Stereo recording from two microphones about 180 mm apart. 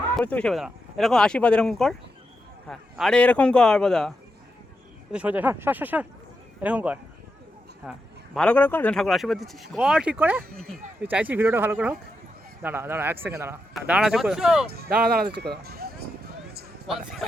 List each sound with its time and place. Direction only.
0.2 s speech: 5° left (ahead or behind)
5.1 s speech: 10° right (ahead or behind)
7.9 s speech: 5° left (ahead or behind)
14.7 s speech: 60° right (ahead or behind)
16.8 s speech: centre (ahead or behind)